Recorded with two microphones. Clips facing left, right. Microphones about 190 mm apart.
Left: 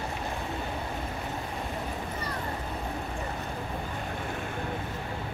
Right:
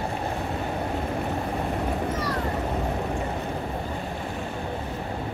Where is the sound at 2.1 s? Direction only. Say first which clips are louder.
Right 7 dB; 90° right.